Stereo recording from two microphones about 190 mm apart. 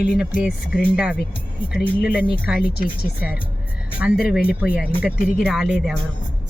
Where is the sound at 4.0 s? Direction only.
5° right (ahead or behind).